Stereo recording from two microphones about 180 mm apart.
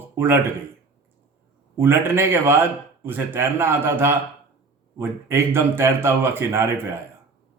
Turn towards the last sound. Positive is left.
turn(degrees=-15)  # may be behind; listen again after turning